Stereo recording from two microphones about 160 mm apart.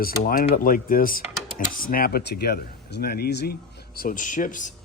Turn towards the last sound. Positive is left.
turn(degrees=55)  # may be behind; listen again after turning